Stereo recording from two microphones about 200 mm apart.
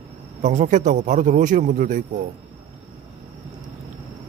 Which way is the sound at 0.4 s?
35° right (ahead or behind).